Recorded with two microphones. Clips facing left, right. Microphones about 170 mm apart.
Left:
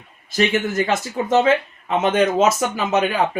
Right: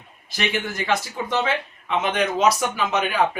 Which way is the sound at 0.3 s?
45° left (ahead or behind).